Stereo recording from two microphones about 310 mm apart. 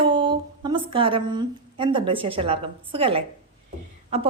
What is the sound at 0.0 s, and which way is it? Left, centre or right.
A woman's voice, centre.